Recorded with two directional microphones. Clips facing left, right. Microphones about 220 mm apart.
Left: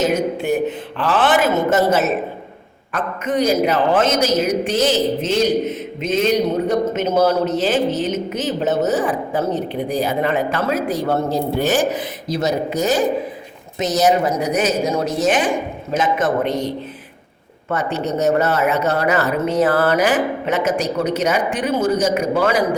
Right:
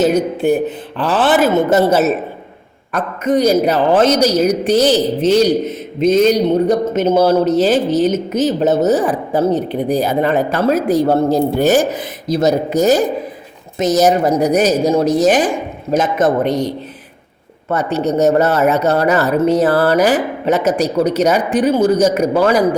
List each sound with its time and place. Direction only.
0.0 s a man's voice: 35° right (ahead or behind)
17.7 s a man's voice: 40° right (ahead or behind)